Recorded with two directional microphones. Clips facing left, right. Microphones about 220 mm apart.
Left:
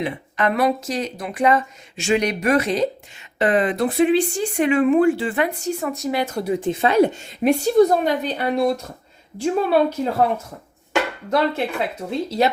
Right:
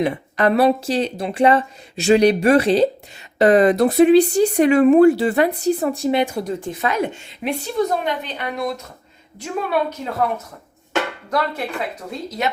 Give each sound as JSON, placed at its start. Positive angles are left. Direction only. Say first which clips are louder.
{"t": 0.0, "sound": "speech", "louder": "right 4 dB", "side_deg": -35}
{"t": 6.4, "sound": "speech", "louder": "left 4 dB", "side_deg": 15}